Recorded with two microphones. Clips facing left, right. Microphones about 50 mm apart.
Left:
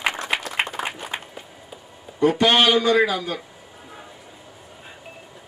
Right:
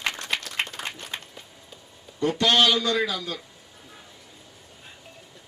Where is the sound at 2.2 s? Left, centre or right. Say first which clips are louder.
Left 4 dB; centre.